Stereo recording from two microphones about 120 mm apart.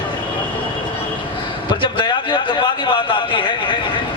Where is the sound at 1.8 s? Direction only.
45° left (ahead or behind).